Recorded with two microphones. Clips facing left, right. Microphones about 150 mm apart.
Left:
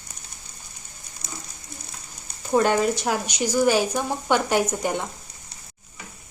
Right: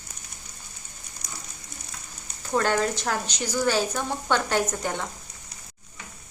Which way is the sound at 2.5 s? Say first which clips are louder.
Left 4 dB; 15° left (ahead or behind).